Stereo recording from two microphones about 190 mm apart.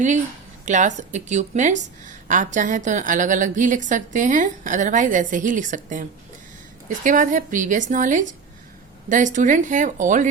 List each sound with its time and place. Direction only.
0.6 s a woman's voice: 40° right (ahead or behind)